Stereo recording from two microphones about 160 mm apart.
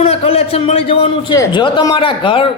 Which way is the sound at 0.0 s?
40° left (ahead or behind).